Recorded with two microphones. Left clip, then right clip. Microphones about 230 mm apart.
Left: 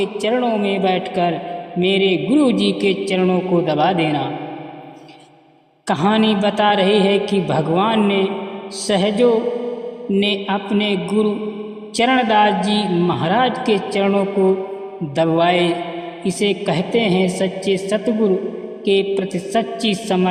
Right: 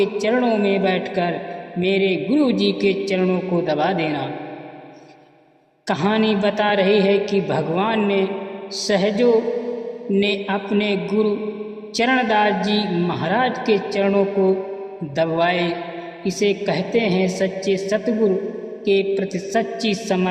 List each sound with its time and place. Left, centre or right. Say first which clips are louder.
0.0 s a man's voice: even; left
5.9 s a man's voice: left 3 dB; left